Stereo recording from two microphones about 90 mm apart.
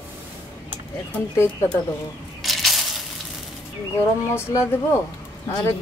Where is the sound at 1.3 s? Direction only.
30° left (ahead or behind).